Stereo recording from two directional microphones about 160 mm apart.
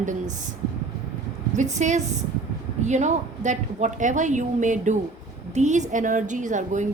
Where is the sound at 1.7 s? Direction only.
45° right (ahead or behind).